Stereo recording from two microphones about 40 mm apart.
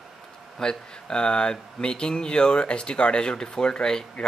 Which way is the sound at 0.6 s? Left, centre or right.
Centre.